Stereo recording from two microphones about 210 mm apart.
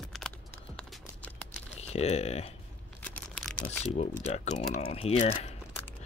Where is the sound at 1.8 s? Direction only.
30° left (ahead or behind).